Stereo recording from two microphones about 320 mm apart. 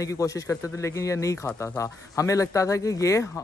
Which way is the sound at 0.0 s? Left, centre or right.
Centre.